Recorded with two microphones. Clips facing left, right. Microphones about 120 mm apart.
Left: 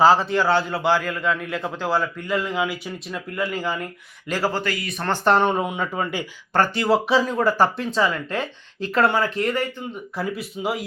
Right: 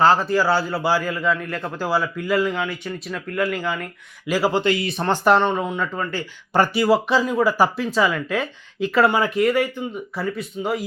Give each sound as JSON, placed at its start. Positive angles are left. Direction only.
{"t": 0.0, "sound": "speech", "side_deg": 0}
{"t": 4.3, "sound": "speech", "side_deg": -10}
{"t": 4.6, "sound": "speech", "side_deg": -25}
{"t": 5.0, "sound": "speech", "side_deg": -10}
{"t": 5.4, "sound": "speech", "side_deg": 10}
{"t": 6.5, "sound": "speech", "side_deg": -10}
{"t": 10.2, "sound": "speech", "side_deg": 5}